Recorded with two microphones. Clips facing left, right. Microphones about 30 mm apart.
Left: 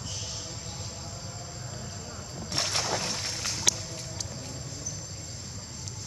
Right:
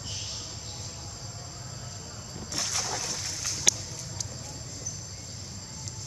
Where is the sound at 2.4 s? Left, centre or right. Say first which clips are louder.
Left 3 dB; left.